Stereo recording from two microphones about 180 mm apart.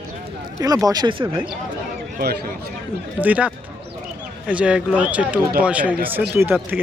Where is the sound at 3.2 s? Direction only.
10° right (ahead or behind).